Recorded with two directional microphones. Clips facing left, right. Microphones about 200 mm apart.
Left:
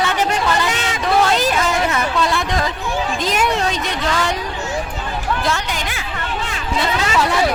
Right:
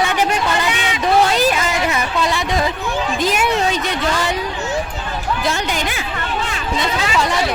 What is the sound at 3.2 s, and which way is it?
Speech, 5° right (ahead or behind).